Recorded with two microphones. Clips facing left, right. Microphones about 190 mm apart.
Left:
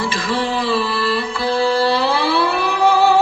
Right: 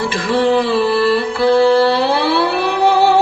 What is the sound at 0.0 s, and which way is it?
Music, 60° right (ahead or behind).